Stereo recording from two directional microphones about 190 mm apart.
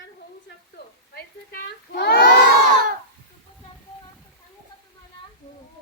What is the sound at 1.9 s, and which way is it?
Crowd, 60° left (ahead or behind).